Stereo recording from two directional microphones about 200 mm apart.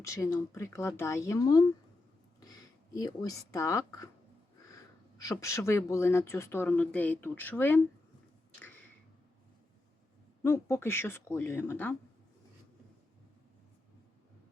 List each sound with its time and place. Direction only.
0.0 s speech: 15° left (ahead or behind)
10.4 s speech: 10° left (ahead or behind)